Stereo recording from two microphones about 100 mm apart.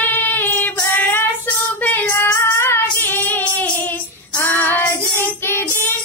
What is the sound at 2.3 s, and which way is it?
Female singing, 25° left (ahead or behind).